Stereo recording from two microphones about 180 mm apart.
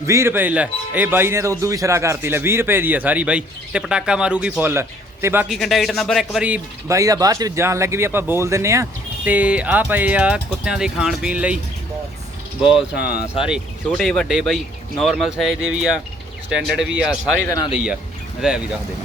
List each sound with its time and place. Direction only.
0.0 s a man's voice: 15° right (ahead or behind)
5.5 s a man's voice: centre (ahead or behind)
13.0 s speech: 55° left (ahead or behind)
13.2 s speech: 35° left (ahead or behind)
13.5 s speech: centre (ahead or behind)
17.4 s speech: 20° left (ahead or behind)
18.4 s speech: 5° right (ahead or behind)